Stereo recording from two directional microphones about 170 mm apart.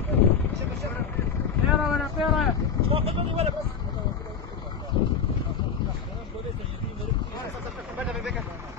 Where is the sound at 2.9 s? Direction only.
35° right (ahead or behind).